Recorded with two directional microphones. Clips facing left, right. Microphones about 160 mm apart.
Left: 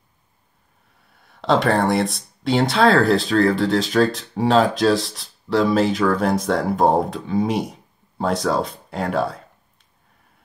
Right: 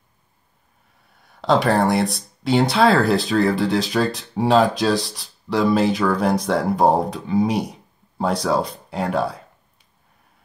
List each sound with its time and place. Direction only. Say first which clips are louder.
1.2 s speech: even; centre (ahead or behind)